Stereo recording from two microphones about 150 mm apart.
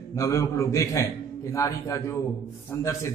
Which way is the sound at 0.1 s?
20° left (ahead or behind).